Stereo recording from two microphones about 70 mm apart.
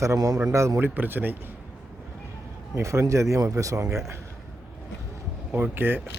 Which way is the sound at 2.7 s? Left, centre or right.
Right.